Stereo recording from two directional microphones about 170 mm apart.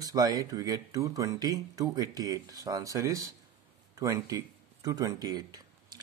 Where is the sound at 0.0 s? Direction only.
20° right (ahead or behind).